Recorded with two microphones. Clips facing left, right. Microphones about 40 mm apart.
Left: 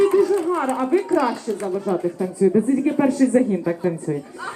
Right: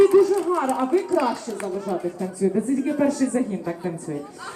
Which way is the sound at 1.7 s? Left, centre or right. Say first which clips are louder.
Left 3 dB; centre.